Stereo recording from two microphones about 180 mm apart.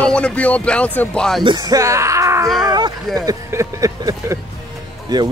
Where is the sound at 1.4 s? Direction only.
25° right (ahead or behind).